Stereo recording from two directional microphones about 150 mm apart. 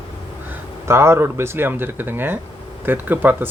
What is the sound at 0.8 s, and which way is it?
Speech, 15° right (ahead or behind).